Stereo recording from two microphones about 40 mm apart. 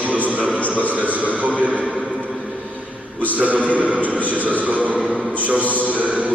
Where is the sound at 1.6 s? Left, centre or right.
Right.